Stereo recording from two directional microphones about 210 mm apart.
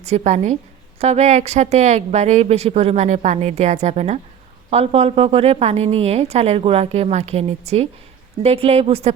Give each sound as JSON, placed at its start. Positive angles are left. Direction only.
{"t": 0.0, "sound": "a woman's voice", "side_deg": -30}